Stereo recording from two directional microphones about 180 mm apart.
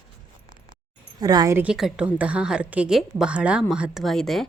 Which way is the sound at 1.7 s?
5° right (ahead or behind).